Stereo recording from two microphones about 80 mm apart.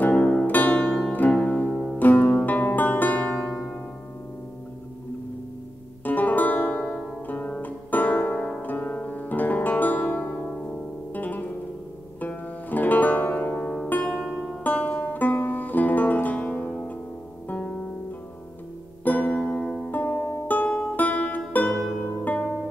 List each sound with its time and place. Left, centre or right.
0.0 s music: centre
3.3 s music: centre
6.0 s music: left
8.4 s music: centre
8.6 s music: left
13.6 s music: centre
13.8 s music: left
19.0 s music: left
19.5 s music: centre
19.9 s music: left